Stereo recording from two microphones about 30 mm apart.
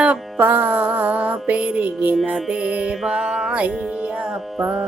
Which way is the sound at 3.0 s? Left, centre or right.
Right.